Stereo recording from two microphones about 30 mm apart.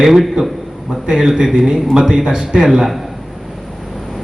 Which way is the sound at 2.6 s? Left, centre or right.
Centre.